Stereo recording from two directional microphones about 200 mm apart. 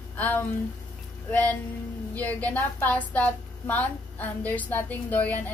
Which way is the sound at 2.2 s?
10° left (ahead or behind).